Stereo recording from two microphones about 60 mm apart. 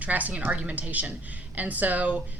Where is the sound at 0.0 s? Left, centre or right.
Right.